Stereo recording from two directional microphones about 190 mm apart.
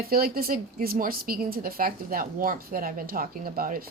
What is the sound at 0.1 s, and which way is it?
A woman's voice, 50° right (ahead or behind).